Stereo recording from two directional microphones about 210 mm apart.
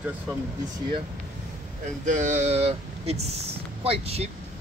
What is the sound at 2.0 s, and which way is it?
Speech, 35° right (ahead or behind).